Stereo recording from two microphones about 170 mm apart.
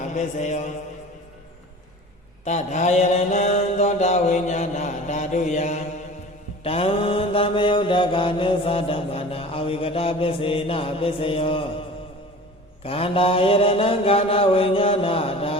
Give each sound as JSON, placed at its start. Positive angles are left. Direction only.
{"t": 0.1, "sound": "mantra", "side_deg": 45}
{"t": 2.4, "sound": "mantra", "side_deg": 45}
{"t": 12.8, "sound": "mantra", "side_deg": 35}